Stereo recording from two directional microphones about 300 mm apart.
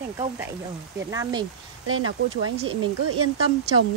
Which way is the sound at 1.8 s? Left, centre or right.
Right.